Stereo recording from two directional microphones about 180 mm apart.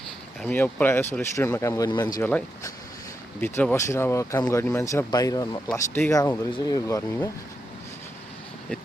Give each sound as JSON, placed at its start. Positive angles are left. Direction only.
{"t": 0.4, "sound": "speech", "side_deg": 10}
{"t": 2.2, "sound": "speech", "side_deg": 10}